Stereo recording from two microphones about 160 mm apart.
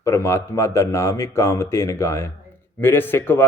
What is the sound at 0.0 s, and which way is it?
A man's voice, 15° left (ahead or behind).